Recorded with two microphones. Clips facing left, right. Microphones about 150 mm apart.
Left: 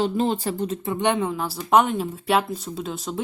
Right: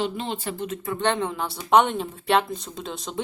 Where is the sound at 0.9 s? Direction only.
15° left (ahead or behind).